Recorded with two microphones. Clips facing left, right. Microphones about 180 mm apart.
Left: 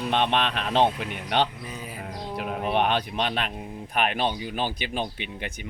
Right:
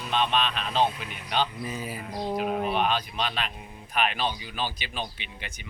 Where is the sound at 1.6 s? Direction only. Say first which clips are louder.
Right 3 dB; 5° right (ahead or behind).